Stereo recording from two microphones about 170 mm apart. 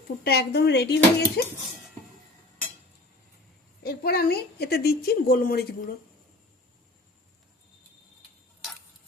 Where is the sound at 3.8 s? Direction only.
65° left (ahead or behind).